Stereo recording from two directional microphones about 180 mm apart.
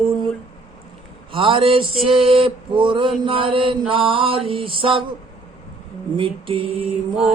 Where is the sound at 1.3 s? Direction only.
30° right (ahead or behind).